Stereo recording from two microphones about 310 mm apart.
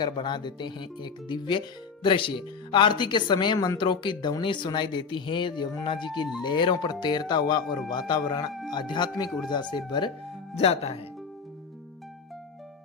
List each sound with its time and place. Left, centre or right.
0.0 s speech: centre